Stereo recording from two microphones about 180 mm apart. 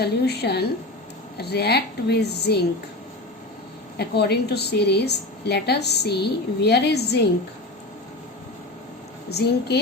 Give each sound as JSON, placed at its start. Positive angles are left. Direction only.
{"t": 0.0, "sound": "a woman's voice", "side_deg": 65}
{"t": 3.9, "sound": "a woman's voice", "side_deg": 65}
{"t": 9.3, "sound": "a woman's voice", "side_deg": 65}